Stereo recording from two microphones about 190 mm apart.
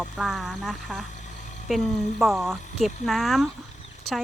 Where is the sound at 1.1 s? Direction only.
40° left (ahead or behind).